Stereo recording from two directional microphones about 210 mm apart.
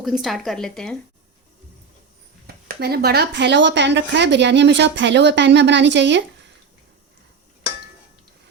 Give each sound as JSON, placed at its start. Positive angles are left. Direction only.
{"t": 0.0, "sound": "a woman's voice", "side_deg": 0}
{"t": 2.6, "sound": "a woman's voice", "side_deg": -50}